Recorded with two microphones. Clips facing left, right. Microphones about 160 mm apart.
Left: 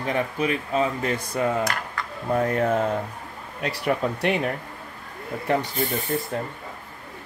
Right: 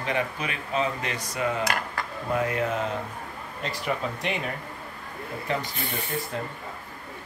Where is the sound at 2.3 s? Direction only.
35° left (ahead or behind).